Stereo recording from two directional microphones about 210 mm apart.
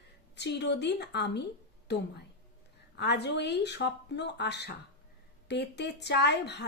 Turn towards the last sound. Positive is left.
turn(degrees=55)  # may be behind; listen again after turning